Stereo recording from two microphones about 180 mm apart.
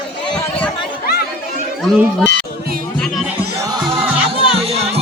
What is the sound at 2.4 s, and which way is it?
Music, 55° right (ahead or behind).